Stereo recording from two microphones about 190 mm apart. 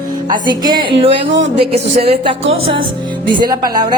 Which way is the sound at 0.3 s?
25° right (ahead or behind).